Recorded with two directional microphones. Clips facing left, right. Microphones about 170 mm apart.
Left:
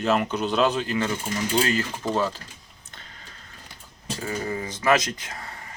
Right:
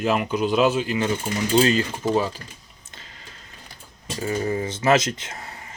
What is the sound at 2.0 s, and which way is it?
Speech, 10° right (ahead or behind).